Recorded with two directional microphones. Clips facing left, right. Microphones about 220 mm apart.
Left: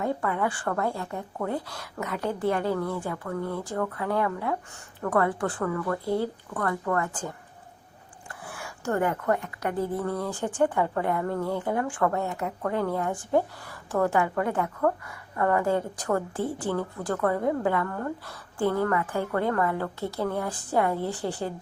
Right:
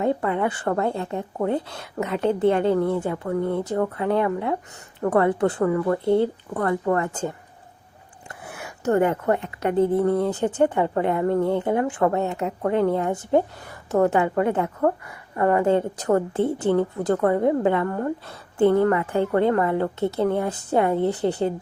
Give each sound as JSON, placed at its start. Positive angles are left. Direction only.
{"t": 0.0, "sound": "a woman's voice", "side_deg": -25}